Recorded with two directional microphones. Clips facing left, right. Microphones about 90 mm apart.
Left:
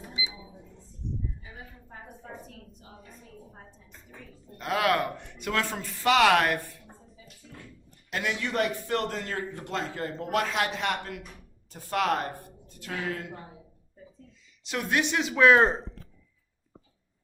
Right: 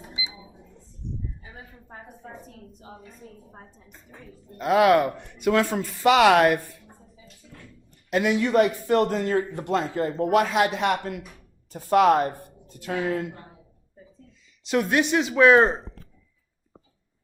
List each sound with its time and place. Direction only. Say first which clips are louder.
4.1 s speech: right 2 dB; 10° right (ahead or behind)
8.1 s speech: right 9 dB; 10° right (ahead or behind)
14.8 s speech: right 1 dB; 10° right (ahead or behind)